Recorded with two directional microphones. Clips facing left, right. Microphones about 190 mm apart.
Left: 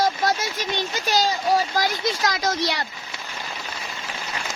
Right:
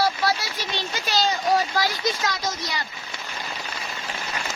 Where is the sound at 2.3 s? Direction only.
70° left (ahead or behind).